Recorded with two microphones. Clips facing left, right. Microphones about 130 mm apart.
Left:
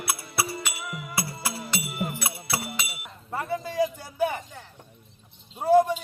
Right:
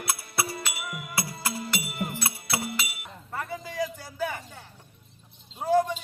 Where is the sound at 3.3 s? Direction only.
25° left (ahead or behind).